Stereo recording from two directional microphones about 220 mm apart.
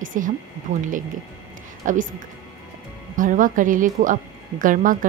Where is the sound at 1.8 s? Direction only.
35° right (ahead or behind).